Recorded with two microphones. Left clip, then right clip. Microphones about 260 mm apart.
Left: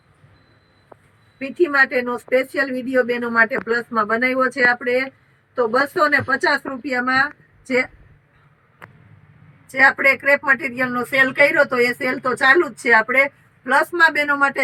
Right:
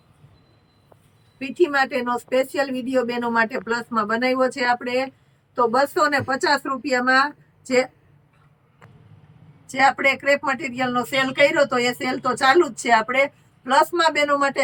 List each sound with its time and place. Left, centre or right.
1.4 s speech: centre
9.7 s speech: centre